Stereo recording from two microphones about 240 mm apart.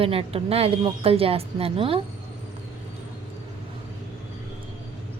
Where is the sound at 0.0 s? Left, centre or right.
Right.